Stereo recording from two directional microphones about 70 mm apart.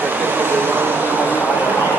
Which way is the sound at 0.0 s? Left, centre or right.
Right.